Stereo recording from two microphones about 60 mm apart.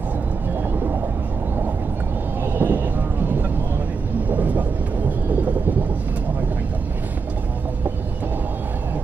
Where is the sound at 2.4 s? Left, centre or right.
Right.